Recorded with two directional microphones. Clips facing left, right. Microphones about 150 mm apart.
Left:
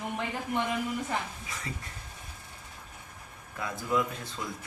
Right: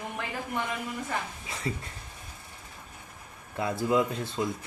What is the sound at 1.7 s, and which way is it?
Speech, 30° right (ahead or behind).